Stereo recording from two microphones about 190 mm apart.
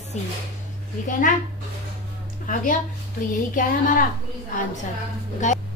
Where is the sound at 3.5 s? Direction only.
45° left (ahead or behind).